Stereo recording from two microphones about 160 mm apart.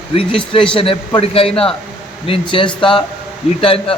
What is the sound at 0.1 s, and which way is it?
A man's voice, 35° left (ahead or behind).